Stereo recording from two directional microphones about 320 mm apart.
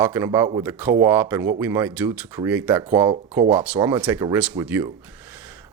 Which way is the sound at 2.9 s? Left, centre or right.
Centre.